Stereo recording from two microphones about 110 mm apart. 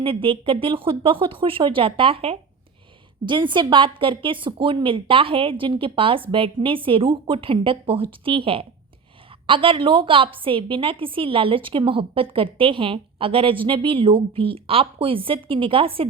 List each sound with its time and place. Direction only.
0.0 s a woman's voice: 55° right (ahead or behind)
3.2 s a woman's voice: 45° right (ahead or behind)